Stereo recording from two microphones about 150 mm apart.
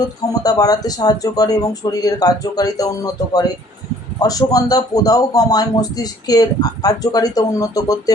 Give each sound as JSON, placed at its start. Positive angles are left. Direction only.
{"t": 0.4, "sound": "speech", "side_deg": 25}